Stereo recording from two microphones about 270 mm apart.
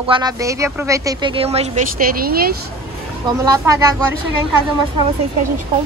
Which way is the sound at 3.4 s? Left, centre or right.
Centre.